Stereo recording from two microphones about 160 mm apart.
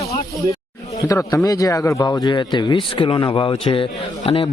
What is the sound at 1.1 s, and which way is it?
Speech, 20° left (ahead or behind).